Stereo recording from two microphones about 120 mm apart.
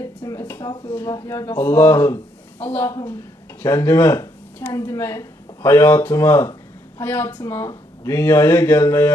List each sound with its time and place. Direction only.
0.4 s a sound: 15° left (ahead or behind)
0.8 s speech: 15° left (ahead or behind)
3.6 s speech: 35° left (ahead or behind)
4.0 s speech: 20° left (ahead or behind)